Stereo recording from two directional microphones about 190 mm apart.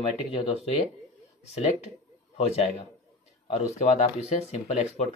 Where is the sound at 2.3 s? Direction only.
35° left (ahead or behind).